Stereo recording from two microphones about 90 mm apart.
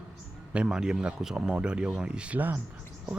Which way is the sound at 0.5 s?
10° right (ahead or behind).